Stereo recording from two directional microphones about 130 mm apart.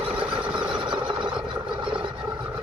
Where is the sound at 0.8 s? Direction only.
40° right (ahead or behind).